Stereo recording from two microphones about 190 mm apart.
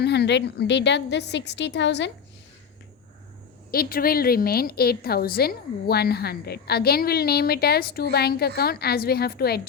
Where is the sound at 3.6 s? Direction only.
50° left (ahead or behind).